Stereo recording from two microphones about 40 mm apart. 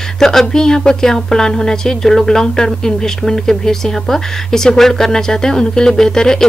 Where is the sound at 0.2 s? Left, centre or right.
Centre.